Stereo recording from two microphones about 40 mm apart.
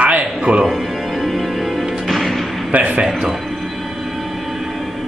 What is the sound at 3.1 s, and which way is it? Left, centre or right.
Speech, centre.